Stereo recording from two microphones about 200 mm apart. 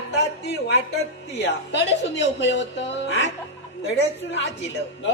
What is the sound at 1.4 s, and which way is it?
Speech, 60° left (ahead or behind).